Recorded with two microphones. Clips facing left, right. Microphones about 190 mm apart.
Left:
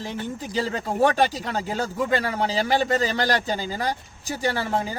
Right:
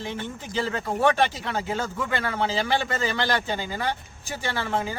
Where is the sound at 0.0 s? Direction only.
40° left (ahead or behind).